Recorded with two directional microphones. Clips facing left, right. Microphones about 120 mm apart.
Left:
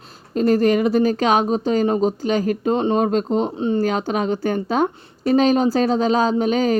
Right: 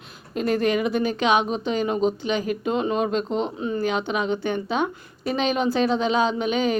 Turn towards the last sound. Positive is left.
turn(degrees=40)  # may be behind; listen again after turning